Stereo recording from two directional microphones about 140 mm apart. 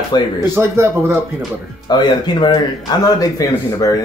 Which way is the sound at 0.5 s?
20° right (ahead or behind).